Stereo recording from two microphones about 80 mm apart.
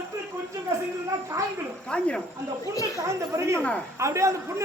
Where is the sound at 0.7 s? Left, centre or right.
Right.